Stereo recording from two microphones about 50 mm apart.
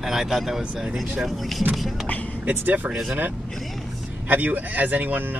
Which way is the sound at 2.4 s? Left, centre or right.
Right.